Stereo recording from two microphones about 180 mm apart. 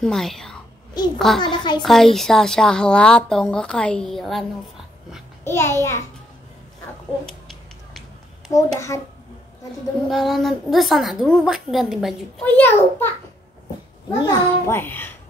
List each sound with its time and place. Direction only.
0.0 s a woman's voice: centre (ahead or behind)
1.4 s a woman's voice: 25° left (ahead or behind)
1.8 s a woman's voice: centre (ahead or behind)
5.4 s a child's voice: 15° left (ahead or behind)
7.2 s a sound: centre (ahead or behind)
8.7 s a child's voice: 15° left (ahead or behind)
10.0 s a woman's voice: centre (ahead or behind)
12.5 s a child's voice: 10° left (ahead or behind)
14.2 s a child's voice: 10° left (ahead or behind)